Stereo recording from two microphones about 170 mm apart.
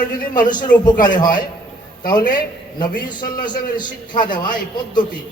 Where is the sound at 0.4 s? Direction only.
25° left (ahead or behind).